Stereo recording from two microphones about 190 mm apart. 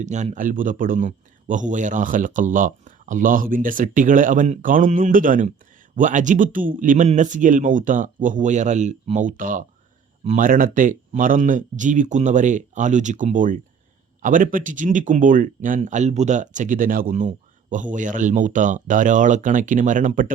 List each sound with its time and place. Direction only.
0.0 s speech: 40° right (ahead or behind)